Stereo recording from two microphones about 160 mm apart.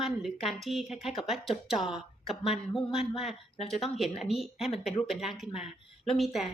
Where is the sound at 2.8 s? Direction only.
35° left (ahead or behind).